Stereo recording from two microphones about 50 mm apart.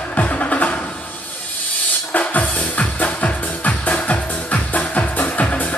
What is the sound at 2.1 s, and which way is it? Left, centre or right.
Music, left.